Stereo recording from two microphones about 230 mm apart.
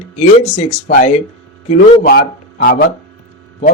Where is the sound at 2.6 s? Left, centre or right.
Left.